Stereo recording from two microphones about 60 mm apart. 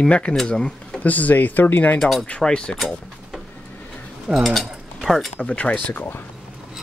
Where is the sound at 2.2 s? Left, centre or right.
Centre.